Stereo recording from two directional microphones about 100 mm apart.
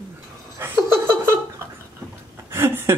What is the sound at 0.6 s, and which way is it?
Laughter, 30° right (ahead or behind).